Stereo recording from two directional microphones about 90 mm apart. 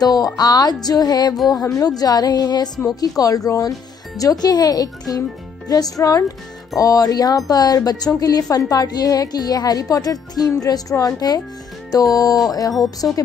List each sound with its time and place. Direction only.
0.0 s a woman's voice: 45° left (ahead or behind)